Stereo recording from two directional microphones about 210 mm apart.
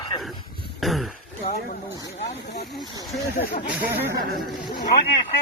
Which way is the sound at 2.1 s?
35° left (ahead or behind).